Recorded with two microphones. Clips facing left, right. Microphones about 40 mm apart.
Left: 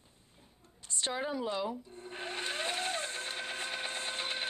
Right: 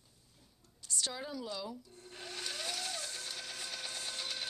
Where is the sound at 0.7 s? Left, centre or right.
Left.